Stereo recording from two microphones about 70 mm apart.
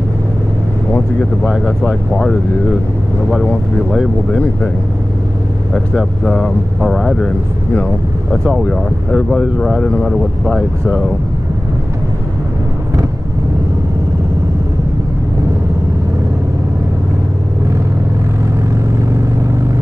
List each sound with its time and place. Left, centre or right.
5.9 s speech: centre